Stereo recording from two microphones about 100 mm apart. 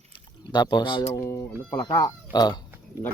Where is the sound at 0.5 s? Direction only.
45° left (ahead or behind).